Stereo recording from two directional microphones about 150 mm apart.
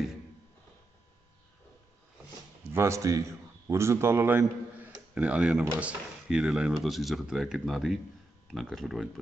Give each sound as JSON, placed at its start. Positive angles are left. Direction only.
{"t": 2.7, "sound": "a man's voice", "side_deg": -20}